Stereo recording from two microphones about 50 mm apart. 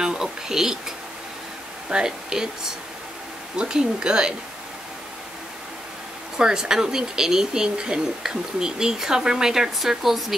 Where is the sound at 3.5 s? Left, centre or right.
Centre.